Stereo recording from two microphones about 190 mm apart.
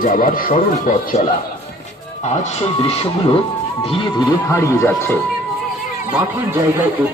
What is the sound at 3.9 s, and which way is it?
Speech, 25° left (ahead or behind).